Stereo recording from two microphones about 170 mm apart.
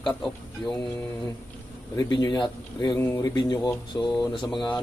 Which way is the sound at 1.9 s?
20° left (ahead or behind).